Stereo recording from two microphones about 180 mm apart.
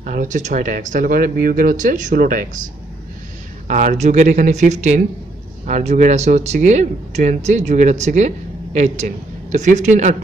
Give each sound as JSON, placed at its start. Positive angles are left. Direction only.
{"t": 0.0, "sound": "speech", "side_deg": -45}
{"t": 3.6, "sound": "a man's voice", "side_deg": -45}